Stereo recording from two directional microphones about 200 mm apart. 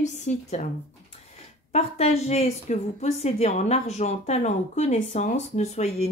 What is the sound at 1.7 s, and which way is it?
Speech, 30° left (ahead or behind).